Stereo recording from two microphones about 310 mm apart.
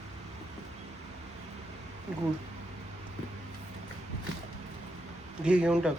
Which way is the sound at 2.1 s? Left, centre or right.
Centre.